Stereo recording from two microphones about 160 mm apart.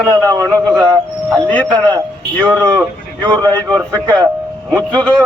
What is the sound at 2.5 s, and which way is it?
A man's voice, 25° right (ahead or behind).